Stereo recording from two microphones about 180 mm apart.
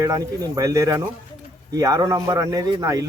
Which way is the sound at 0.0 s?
20° right (ahead or behind).